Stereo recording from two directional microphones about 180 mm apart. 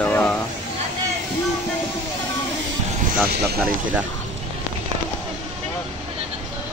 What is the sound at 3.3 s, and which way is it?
Speech, 65° right (ahead or behind).